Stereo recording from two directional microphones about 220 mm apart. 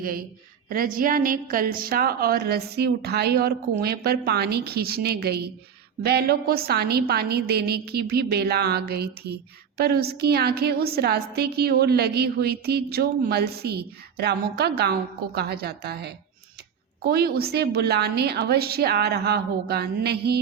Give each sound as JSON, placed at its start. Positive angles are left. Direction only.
{"t": 0.0, "sound": "a woman's voice", "side_deg": -40}